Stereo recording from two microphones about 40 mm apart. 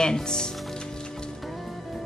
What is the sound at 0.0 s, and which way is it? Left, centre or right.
Speech, centre.